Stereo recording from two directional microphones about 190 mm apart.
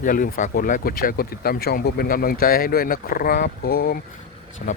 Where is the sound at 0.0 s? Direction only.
45° left (ahead or behind).